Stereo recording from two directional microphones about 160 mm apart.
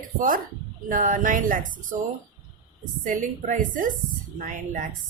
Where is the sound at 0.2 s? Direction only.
55° right (ahead or behind).